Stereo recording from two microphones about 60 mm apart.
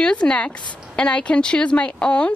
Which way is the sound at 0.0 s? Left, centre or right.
Centre.